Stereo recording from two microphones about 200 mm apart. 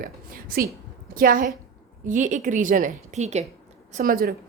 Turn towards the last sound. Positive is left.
turn(degrees=-45)  # may be behind; listen again after turning